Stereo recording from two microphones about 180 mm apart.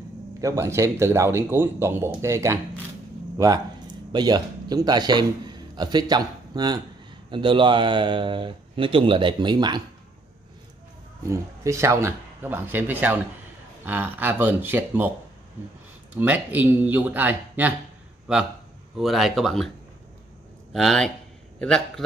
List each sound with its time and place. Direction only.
0.4 s speech: 15° right (ahead or behind)
11.2 s speech: 15° right (ahead or behind)
16.2 s speech: 10° right (ahead or behind)
20.7 s speech: centre (ahead or behind)